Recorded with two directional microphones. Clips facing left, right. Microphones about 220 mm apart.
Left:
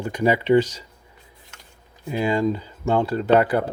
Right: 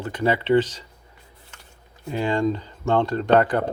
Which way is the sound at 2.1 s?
10° left (ahead or behind).